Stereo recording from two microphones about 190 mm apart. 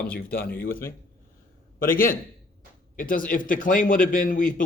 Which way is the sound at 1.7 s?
45° left (ahead or behind).